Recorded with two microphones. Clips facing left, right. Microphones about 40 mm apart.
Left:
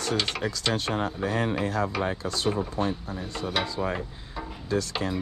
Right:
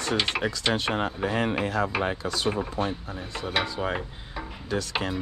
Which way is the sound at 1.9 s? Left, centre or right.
Right.